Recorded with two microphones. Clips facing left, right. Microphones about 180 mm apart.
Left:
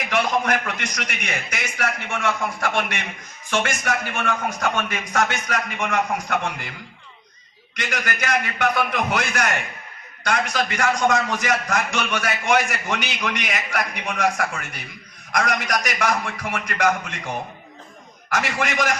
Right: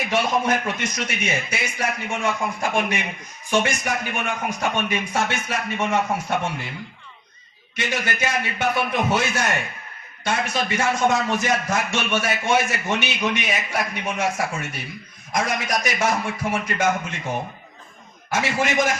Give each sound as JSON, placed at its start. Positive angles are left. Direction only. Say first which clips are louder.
{"t": 0.1, "sound": "a man's voice", "louder": "even", "side_deg": -25}
{"t": 1.5, "sound": "a man's voice", "louder": "right 1 dB", "side_deg": -15}
{"t": 5.1, "sound": "a man's voice", "louder": "left 6 dB", "side_deg": -25}
{"t": 7.7, "sound": "a man's voice", "louder": "right 2 dB", "side_deg": -25}
{"t": 18.3, "sound": "a man's voice", "louder": "right 2 dB", "side_deg": -25}